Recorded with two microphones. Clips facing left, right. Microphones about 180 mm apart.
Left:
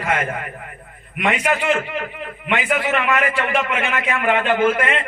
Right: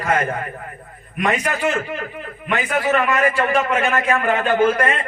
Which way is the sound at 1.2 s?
40° right (ahead or behind).